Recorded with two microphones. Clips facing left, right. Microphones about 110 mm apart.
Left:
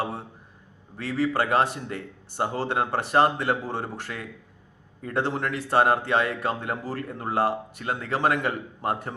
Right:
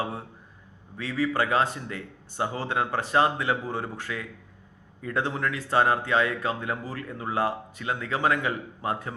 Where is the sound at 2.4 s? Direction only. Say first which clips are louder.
Left 2 dB; 45° left (ahead or behind).